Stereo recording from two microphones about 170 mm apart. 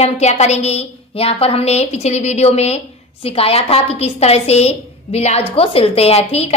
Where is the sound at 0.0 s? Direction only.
40° left (ahead or behind).